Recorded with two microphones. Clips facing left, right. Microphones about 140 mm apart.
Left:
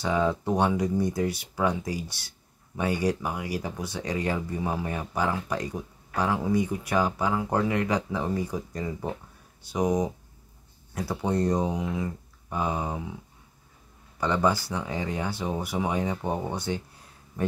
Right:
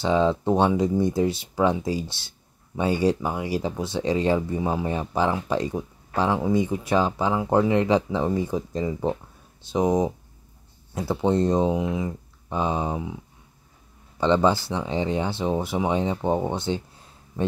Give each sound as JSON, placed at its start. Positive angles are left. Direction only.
{"t": 0.0, "sound": "speech", "side_deg": -25}
{"t": 14.2, "sound": "speech", "side_deg": -25}